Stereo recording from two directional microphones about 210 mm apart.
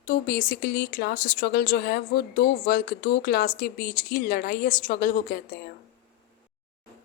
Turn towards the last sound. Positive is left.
turn(degrees=40)  # may be behind; listen again after turning